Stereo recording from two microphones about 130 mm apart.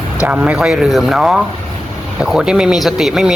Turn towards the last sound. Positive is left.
turn(degrees=-5)  # may be behind; listen again after turning